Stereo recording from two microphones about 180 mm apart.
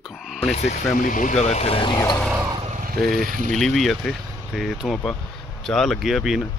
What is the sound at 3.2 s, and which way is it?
Speech, 50° right (ahead or behind).